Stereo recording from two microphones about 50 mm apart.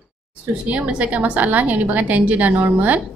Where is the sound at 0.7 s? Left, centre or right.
Right.